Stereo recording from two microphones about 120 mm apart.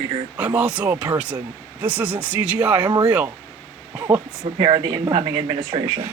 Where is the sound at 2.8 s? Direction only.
35° right (ahead or behind).